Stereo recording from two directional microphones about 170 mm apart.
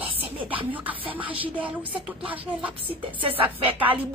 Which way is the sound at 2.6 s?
30° right (ahead or behind).